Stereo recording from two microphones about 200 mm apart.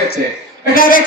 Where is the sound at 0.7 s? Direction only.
45° left (ahead or behind).